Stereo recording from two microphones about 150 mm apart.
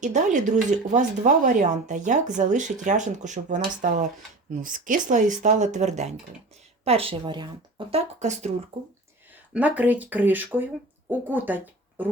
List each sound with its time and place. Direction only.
0.0 s speech: 55° right (ahead or behind)
9.5 s speech: 10° right (ahead or behind)